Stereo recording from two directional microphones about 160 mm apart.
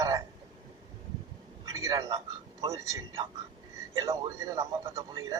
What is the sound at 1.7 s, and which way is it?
A man's voice, 20° right (ahead or behind).